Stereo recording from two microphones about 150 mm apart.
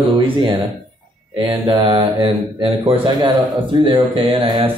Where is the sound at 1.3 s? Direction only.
35° right (ahead or behind).